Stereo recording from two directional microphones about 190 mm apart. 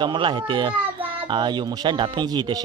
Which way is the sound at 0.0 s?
25° right (ahead or behind).